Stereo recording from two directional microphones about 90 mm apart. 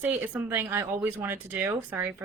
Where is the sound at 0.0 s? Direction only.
20° right (ahead or behind).